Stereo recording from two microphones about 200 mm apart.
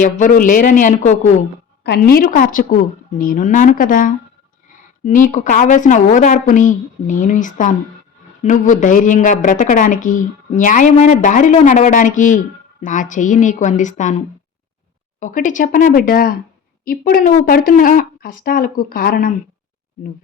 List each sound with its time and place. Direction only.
0.0 s a woman's voice: 40° left (ahead or behind)
1.8 s a woman's voice: 50° left (ahead or behind)
15.2 s speech: 40° left (ahead or behind)